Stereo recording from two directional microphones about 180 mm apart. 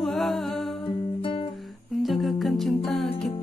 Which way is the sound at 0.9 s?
30° left (ahead or behind).